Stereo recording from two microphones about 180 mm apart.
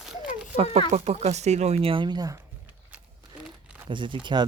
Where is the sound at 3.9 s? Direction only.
25° right (ahead or behind).